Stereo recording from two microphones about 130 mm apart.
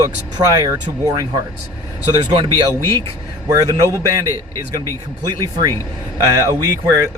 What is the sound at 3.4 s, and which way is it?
Speech, 25° right (ahead or behind).